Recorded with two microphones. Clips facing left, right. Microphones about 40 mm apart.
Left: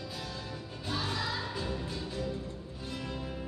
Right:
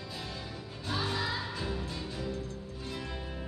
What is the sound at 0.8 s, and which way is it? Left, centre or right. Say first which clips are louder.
Music: right 1 dB; centre.